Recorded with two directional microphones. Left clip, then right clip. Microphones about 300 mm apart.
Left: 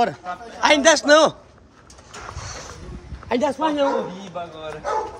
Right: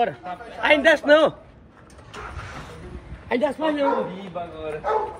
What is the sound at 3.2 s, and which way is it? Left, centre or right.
Speech, centre.